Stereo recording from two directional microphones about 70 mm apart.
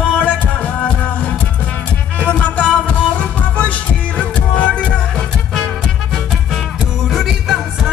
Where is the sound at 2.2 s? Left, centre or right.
Left.